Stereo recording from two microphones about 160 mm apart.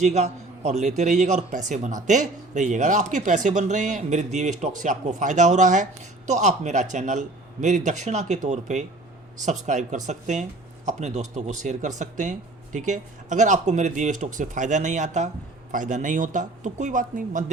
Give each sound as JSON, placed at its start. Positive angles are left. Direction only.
{"t": 0.0, "sound": "a man's voice", "side_deg": -45}